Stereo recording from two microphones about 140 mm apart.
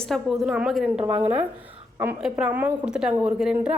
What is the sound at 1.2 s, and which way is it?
A woman's voice, 15° right (ahead or behind).